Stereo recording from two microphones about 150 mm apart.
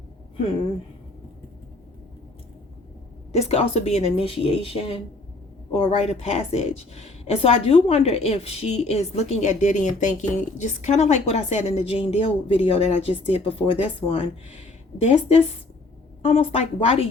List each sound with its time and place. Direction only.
3.3 s a woman's voice: 45° left (ahead or behind)